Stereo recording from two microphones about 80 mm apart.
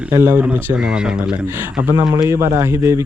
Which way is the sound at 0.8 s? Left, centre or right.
Centre.